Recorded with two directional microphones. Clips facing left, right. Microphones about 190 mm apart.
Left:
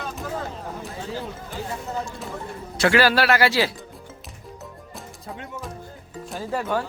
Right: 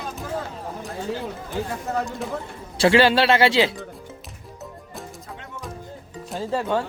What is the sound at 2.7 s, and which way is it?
Speech, 30° right (ahead or behind).